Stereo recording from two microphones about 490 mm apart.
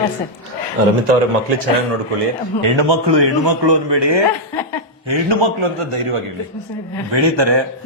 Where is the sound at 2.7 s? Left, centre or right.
Right.